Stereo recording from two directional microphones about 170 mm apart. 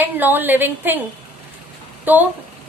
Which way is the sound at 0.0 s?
10° right (ahead or behind).